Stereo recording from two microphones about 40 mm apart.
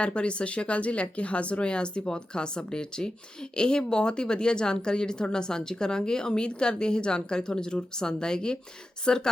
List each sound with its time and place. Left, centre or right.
0.0 s speech: left